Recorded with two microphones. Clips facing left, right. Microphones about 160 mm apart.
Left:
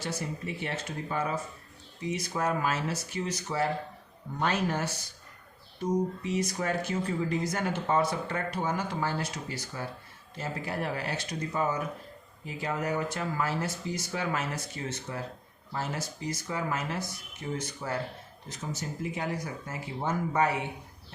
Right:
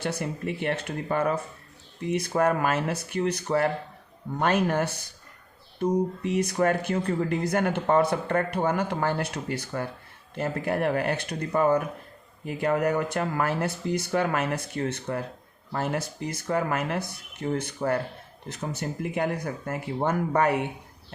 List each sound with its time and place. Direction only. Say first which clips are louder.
0.0 s speech: right 5 dB; 60° right (ahead or behind)